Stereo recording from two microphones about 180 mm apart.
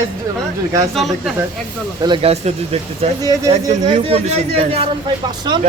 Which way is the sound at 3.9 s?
35° right (ahead or behind).